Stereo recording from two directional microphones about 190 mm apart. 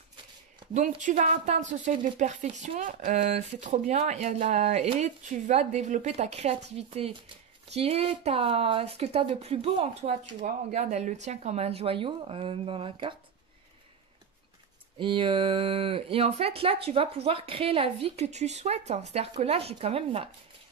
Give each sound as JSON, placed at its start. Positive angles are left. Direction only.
{"t": 0.7, "sound": "a woman's voice", "side_deg": -40}
{"t": 15.0, "sound": "a woman's voice", "side_deg": -25}